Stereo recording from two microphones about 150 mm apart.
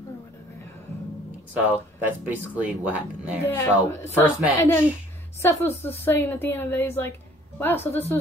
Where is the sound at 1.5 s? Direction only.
10° right (ahead or behind).